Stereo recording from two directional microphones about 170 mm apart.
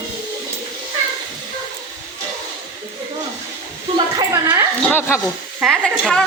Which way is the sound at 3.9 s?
20° right (ahead or behind).